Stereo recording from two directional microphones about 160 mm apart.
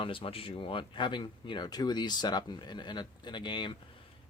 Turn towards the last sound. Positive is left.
turn(degrees=30)  # may be behind; listen again after turning